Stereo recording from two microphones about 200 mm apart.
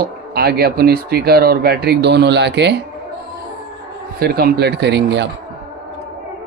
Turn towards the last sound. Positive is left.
turn(degrees=-55)  # may be behind; listen again after turning